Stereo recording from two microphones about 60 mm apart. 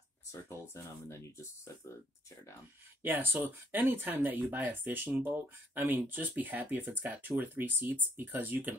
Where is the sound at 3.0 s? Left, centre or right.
Right.